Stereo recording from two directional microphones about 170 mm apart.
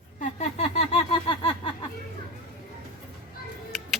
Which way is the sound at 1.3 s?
30° left (ahead or behind).